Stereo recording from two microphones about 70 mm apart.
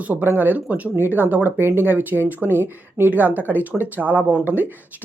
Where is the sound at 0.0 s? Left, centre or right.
Right.